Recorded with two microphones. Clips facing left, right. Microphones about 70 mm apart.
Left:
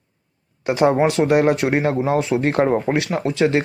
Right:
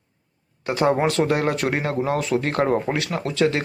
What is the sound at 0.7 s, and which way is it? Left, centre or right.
Speech, left.